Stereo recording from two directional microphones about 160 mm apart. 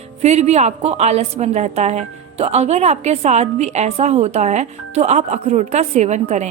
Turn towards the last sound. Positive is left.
turn(degrees=-45)  # may be behind; listen again after turning